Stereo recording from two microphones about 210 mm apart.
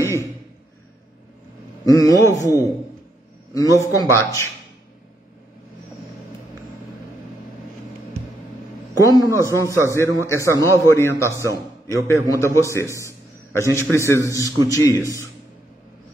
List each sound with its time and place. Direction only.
0.0 s a sound: 15° left (ahead or behind)
1.9 s a man's voice: 15° left (ahead or behind)
9.1 s a man's voice: 15° left (ahead or behind)
11.4 s a man's voice: 15° right (ahead or behind)
12.3 s a man's voice: 15° left (ahead or behind)